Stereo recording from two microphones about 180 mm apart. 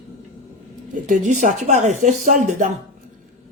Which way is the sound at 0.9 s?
45° right (ahead or behind).